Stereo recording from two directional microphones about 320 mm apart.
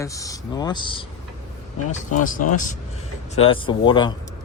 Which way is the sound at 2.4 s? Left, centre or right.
Left.